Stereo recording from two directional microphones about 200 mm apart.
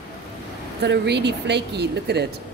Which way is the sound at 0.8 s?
55° right (ahead or behind).